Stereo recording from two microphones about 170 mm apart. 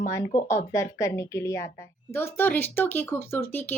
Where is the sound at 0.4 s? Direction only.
15° left (ahead or behind).